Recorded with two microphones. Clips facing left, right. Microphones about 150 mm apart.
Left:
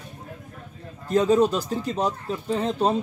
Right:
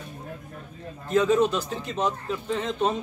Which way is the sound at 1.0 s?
35° left (ahead or behind).